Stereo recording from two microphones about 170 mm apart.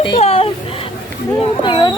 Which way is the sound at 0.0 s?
30° left (ahead or behind).